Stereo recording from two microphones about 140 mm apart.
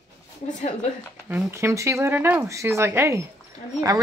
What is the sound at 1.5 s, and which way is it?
Speech, 20° right (ahead or behind).